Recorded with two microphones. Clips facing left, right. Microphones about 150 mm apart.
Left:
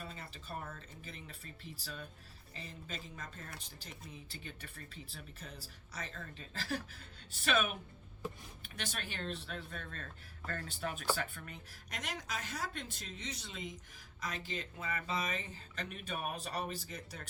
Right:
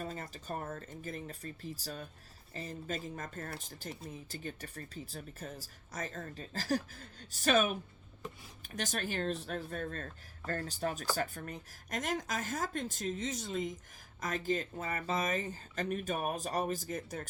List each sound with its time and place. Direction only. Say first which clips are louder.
0.0 s speech: right 7 dB; 45° right (ahead or behind)